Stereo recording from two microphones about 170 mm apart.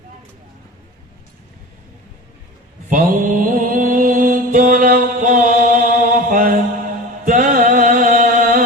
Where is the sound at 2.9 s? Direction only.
50° right (ahead or behind).